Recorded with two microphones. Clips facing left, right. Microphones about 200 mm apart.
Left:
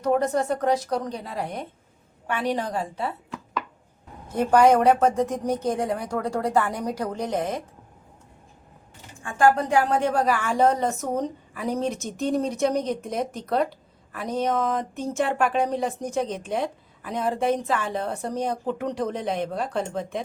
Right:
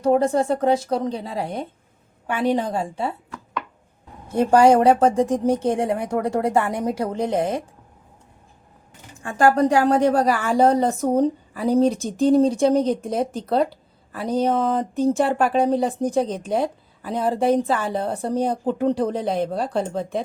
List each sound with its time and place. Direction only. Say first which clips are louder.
0.0 s a woman's voice: right 4 dB; 30° right (ahead or behind)
4.3 s a woman's voice: right 3 dB; 30° right (ahead or behind)
9.2 s speech: right 3 dB; 40° right (ahead or behind)